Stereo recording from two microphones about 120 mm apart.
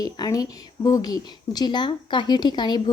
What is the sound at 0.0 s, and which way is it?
A woman's voice, 30° left (ahead or behind).